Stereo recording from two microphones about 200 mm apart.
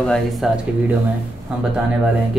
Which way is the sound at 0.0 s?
Centre (ahead or behind).